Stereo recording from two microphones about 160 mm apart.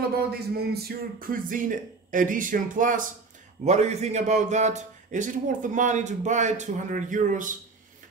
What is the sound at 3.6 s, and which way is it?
A man's voice, 45° right (ahead or behind).